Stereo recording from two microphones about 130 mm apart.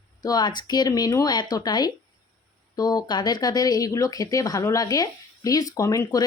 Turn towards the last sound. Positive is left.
turn(degrees=25)  # may be behind; listen again after turning